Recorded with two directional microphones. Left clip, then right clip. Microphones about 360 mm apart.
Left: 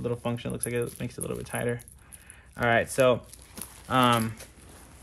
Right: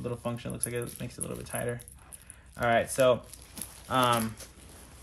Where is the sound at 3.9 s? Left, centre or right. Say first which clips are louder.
Left 3 dB; left.